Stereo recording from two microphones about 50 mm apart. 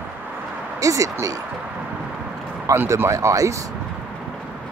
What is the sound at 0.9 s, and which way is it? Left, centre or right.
Speech, right.